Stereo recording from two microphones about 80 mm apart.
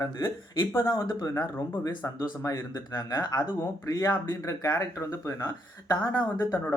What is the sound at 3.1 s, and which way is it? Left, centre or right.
Speech, left.